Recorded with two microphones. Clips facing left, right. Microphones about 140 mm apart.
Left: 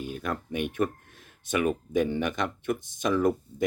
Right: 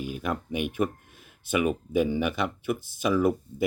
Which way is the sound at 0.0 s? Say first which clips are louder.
Right 2 dB; 5° right (ahead or behind).